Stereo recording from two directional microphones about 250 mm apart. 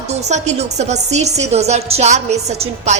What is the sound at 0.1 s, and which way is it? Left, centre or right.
A woman's voice, right.